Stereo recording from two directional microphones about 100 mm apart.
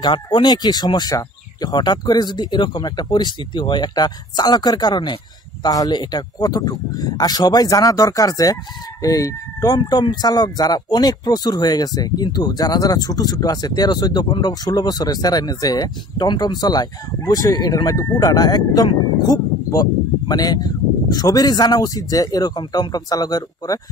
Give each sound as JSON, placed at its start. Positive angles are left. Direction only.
{"t": 0.0, "sound": "speech", "side_deg": 50}
{"t": 9.8, "sound": "speech", "side_deg": 50}